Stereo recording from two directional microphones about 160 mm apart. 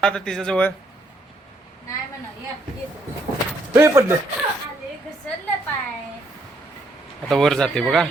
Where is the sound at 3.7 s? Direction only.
15° right (ahead or behind).